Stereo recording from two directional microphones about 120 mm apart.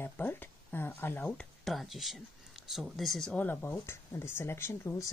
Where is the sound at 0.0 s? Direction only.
20° left (ahead or behind).